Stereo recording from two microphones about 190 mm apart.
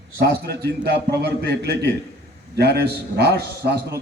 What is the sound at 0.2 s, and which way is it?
A man's voice, 60° right (ahead or behind).